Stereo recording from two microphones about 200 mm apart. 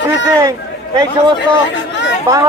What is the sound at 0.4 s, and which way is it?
A man's voice, 20° right (ahead or behind).